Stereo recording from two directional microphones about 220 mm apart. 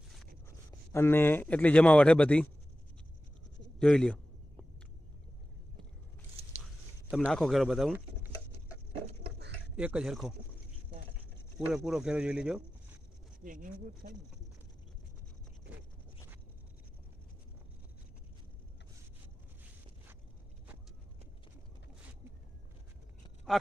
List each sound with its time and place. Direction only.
0.9 s speech: 10° left (ahead or behind)
3.8 s speech: 5° left (ahead or behind)
6.4 s biting: 25° right (ahead or behind)
7.1 s speech: centre (ahead or behind)
9.8 s speech: 5° right (ahead or behind)
11.6 s speech: 5° right (ahead or behind)
13.4 s speech: 40° right (ahead or behind)
23.5 s speech: centre (ahead or behind)